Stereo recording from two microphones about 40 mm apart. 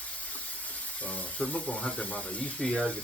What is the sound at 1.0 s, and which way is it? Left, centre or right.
Speech, left.